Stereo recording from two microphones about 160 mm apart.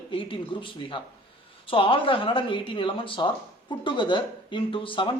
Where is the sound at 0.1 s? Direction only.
35° left (ahead or behind).